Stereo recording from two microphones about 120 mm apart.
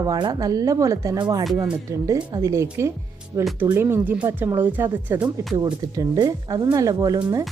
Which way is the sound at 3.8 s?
20° right (ahead or behind).